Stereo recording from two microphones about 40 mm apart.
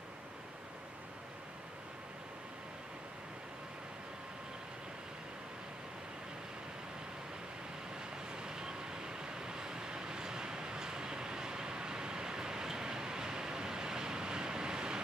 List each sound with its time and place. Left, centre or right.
8.3 s vehicle: centre